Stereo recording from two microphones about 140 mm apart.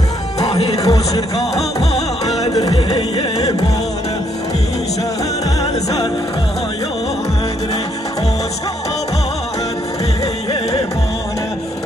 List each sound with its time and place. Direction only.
0.8 s speech: 25° left (ahead or behind)
2.5 s music: 30° left (ahead or behind)